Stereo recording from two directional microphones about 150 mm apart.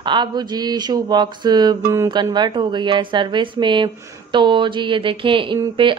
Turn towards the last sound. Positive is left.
turn(degrees=-30)  # may be behind; listen again after turning